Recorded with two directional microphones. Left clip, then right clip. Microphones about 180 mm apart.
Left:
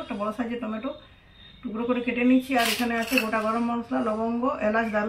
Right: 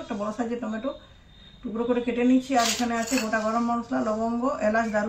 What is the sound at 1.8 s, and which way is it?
Speech, 10° right (ahead or behind).